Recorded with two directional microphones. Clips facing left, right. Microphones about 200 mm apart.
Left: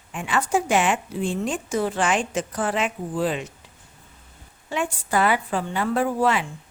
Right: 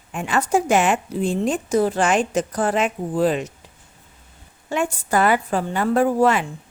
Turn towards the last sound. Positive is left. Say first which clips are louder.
# right 4 dB
turn(degrees=-45)  # may be behind; listen again after turning